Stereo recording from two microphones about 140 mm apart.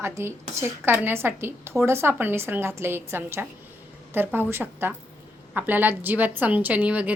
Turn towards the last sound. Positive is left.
turn(degrees=-10)  # may be behind; listen again after turning